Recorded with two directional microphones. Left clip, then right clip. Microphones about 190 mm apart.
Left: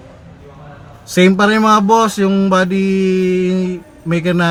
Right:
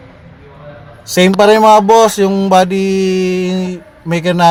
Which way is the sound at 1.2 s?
25° right (ahead or behind).